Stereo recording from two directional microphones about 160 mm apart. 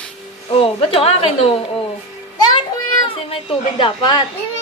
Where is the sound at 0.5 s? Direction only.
35° left (ahead or behind).